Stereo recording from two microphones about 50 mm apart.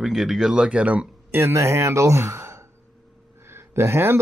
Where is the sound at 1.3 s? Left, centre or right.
Right.